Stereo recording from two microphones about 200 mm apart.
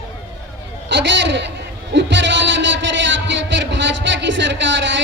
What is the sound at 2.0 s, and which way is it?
Music, 60° right (ahead or behind).